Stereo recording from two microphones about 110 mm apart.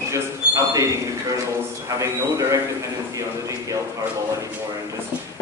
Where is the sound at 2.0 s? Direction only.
30° right (ahead or behind).